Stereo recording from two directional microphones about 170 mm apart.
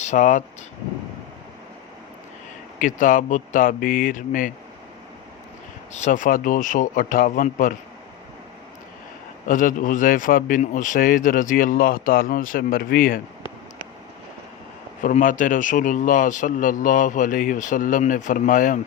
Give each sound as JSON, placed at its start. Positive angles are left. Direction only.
{"t": 0.0, "sound": "speech", "side_deg": 45}
{"t": 2.7, "sound": "a man's voice", "side_deg": 50}
{"t": 5.9, "sound": "a man's voice", "side_deg": 50}
{"t": 9.5, "sound": "a man's voice", "side_deg": 50}
{"t": 15.0, "sound": "a man's voice", "side_deg": 50}